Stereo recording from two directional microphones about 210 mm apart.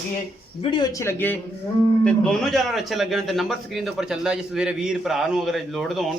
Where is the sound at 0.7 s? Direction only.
15° left (ahead or behind).